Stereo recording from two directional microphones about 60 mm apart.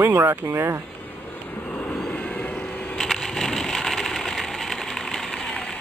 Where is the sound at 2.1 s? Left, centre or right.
Left.